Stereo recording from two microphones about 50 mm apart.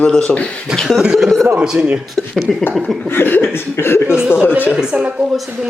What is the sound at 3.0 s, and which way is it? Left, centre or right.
Speech, left.